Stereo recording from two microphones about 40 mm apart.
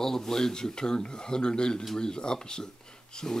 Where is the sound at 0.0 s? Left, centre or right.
Centre.